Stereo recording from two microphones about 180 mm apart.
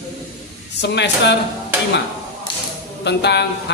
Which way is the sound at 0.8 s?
75° left (ahead or behind).